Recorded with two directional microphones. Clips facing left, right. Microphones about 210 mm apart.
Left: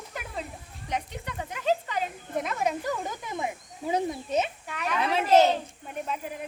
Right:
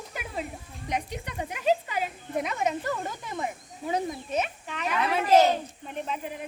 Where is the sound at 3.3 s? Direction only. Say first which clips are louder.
Left 1 dB; 15° left (ahead or behind).